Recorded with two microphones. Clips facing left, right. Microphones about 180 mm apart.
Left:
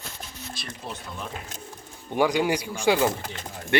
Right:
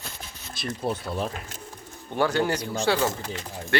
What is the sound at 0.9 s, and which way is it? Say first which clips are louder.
Speech: right 9 dB; 35° right (ahead or behind).